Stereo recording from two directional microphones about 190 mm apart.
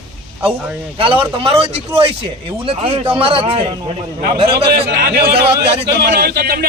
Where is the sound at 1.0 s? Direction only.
30° right (ahead or behind).